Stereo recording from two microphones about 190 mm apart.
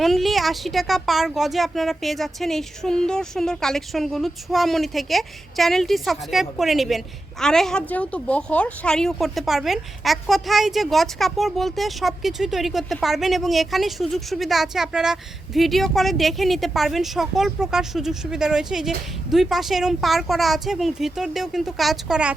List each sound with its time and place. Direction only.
0.0 s speech: centre (ahead or behind)